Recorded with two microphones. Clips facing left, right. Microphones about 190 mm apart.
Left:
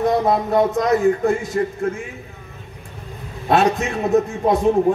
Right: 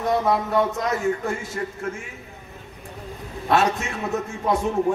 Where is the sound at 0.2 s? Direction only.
35° left (ahead or behind).